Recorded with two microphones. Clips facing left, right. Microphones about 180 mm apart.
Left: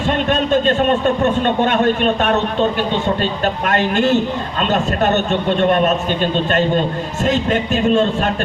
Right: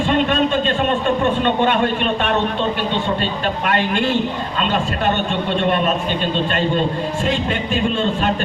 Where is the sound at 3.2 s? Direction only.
45° left (ahead or behind).